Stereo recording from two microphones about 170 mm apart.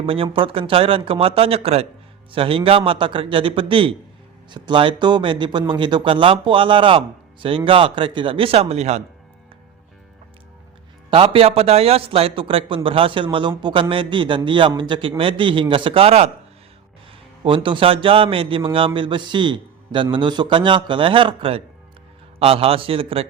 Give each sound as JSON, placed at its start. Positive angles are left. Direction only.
{"t": 0.0, "sound": "speech", "side_deg": -30}
{"t": 11.1, "sound": "a man's voice", "side_deg": -35}